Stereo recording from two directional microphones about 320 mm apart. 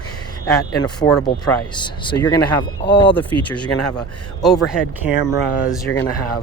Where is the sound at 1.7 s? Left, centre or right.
Centre.